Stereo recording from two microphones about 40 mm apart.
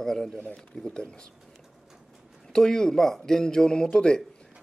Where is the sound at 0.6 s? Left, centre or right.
Centre.